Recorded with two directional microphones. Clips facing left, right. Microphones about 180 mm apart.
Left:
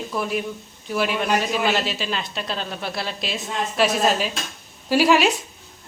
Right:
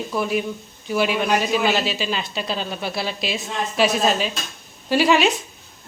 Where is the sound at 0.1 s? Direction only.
Centre (ahead or behind).